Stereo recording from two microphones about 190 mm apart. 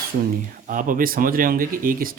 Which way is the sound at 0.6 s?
45° right (ahead or behind).